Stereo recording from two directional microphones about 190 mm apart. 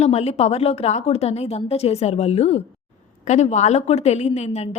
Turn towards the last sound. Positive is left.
turn(degrees=35)  # may be behind; listen again after turning